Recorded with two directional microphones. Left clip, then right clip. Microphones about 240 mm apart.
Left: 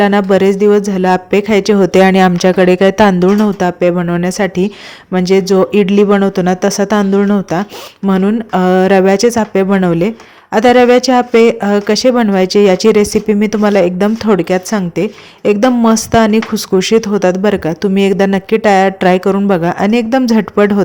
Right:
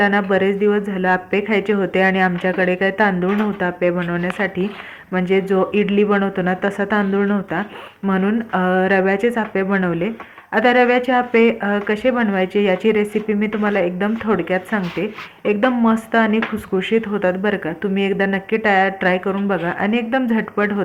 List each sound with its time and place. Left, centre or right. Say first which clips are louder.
0.0 s speech: left 6 dB; left